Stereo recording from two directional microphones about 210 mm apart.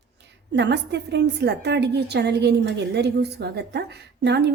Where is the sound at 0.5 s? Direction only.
55° right (ahead or behind).